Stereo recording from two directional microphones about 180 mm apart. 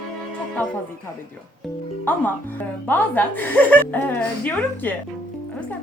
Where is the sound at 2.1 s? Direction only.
10° left (ahead or behind).